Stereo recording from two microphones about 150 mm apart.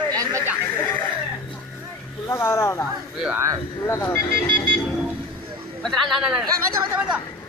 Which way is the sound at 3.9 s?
15° left (ahead or behind).